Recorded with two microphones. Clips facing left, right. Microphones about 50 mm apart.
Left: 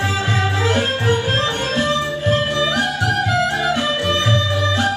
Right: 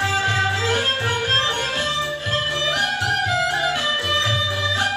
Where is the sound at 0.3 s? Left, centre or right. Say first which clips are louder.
Left 1 dB; centre.